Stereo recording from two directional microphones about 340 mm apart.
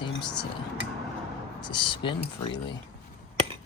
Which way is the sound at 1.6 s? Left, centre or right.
Centre.